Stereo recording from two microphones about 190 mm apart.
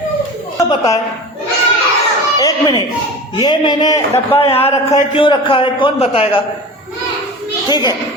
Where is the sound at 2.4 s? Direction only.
20° left (ahead or behind).